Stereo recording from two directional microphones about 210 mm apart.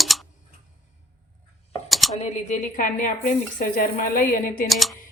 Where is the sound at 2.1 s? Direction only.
35° left (ahead or behind).